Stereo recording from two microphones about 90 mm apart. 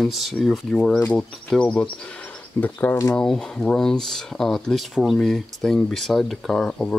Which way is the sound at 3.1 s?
5° left (ahead or behind).